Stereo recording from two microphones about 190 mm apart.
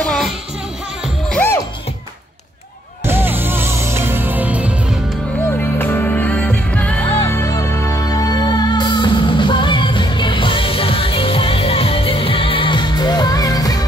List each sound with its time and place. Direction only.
0.0 s music: 5° left (ahead or behind)
1.3 s music: 10° left (ahead or behind)
3.1 s music: 10° right (ahead or behind)
5.6 s music: 10° left (ahead or behind)